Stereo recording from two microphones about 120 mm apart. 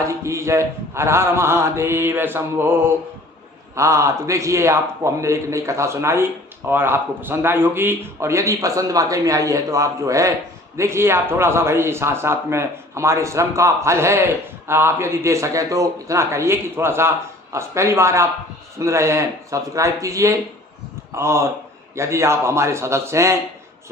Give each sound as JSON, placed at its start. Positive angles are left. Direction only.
{"t": 0.1, "sound": "a man's voice", "side_deg": -25}